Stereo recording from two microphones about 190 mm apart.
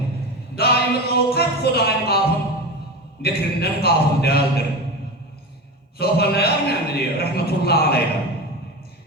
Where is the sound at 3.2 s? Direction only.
55° left (ahead or behind).